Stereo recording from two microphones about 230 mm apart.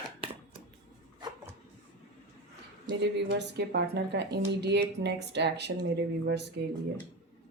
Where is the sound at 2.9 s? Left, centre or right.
Centre.